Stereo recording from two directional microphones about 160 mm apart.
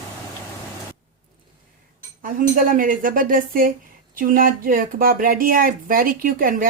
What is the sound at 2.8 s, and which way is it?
Speech, 60° right (ahead or behind).